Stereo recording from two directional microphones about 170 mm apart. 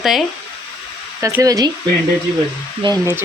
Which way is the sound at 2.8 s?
25° right (ahead or behind).